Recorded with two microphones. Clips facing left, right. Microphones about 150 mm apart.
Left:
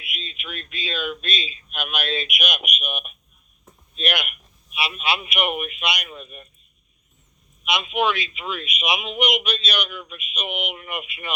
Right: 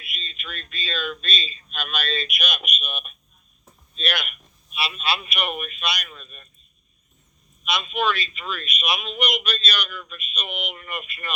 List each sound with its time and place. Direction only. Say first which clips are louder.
0.0 s a man's voice: left 2 dB; 15° left (ahead or behind)
7.6 s a man's voice: left 2 dB; 15° left (ahead or behind)